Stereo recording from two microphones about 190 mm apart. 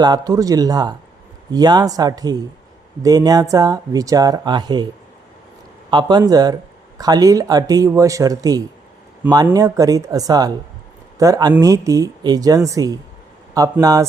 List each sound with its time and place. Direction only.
0.0 s speech: 20° right (ahead or behind)
5.9 s speech: 25° right (ahead or behind)